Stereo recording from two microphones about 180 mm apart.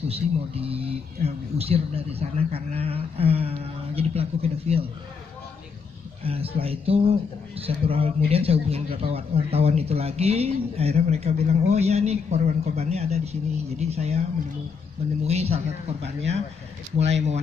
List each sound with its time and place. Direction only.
0.1 s a man's voice: 30° right (ahead or behind)
6.6 s a man's voice: 35° right (ahead or behind)
15.2 s a man's voice: 35° right (ahead or behind)